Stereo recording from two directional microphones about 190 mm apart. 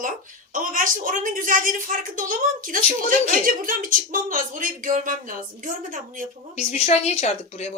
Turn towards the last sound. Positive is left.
turn(degrees=35)  # may be behind; listen again after turning